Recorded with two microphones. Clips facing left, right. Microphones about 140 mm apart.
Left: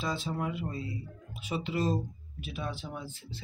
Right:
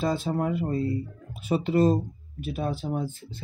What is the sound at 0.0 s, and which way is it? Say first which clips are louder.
Speech: right 7 dB; 50° right (ahead or behind).